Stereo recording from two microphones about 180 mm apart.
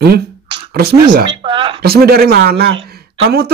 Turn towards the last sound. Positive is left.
turn(degrees=-65)  # may be behind; listen again after turning